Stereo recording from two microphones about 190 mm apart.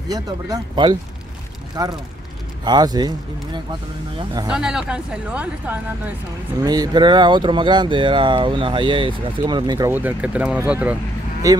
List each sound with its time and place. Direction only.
0.1 s speech: 20° right (ahead or behind)
4.5 s speech: 5° right (ahead or behind)
6.6 s speech: 20° right (ahead or behind)